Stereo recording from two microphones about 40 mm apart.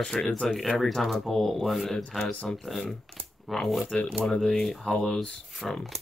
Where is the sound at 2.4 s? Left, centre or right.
Centre.